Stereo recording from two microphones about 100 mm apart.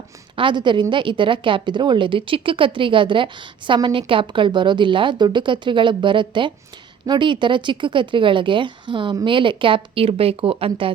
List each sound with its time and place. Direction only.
0.3 s a woman's voice: 55° right (ahead or behind)